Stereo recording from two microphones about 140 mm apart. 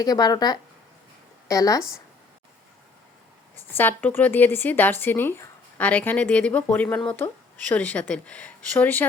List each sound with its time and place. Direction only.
0.0 s speech: 30° left (ahead or behind)
3.8 s speech: 15° left (ahead or behind)